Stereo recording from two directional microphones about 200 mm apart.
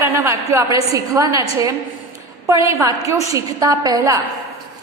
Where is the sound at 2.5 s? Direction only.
15° right (ahead or behind).